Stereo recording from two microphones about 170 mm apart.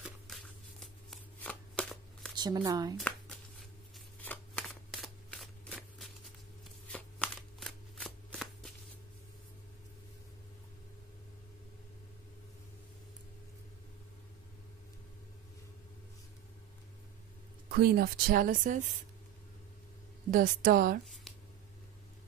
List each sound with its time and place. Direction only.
0.0 s shuffling cards: centre (ahead or behind)
2.3 s speech: 25° right (ahead or behind)
3.0 s shuffling cards: 5° left (ahead or behind)
17.6 s speech: 65° right (ahead or behind)
20.2 s speech: 55° right (ahead or behind)